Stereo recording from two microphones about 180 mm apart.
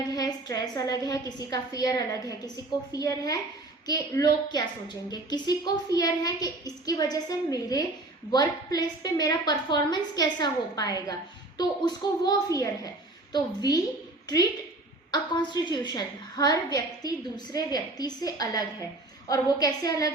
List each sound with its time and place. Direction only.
0.1 s a woman's voice: 20° left (ahead or behind)
15.1 s a woman's voice: 25° left (ahead or behind)